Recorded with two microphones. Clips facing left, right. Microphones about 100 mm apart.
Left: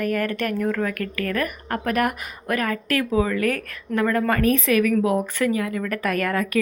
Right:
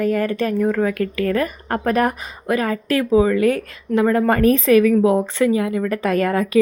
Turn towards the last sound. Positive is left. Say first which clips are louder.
# right 5 dB
turn(degrees=-25)  # may be behind; listen again after turning